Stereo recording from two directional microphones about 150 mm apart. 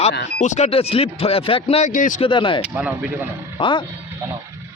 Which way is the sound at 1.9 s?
60° left (ahead or behind).